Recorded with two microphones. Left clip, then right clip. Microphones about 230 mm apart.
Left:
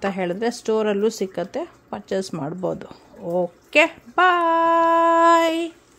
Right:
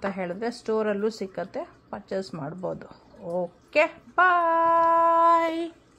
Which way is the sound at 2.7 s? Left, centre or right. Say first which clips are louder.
Left 5 dB; left.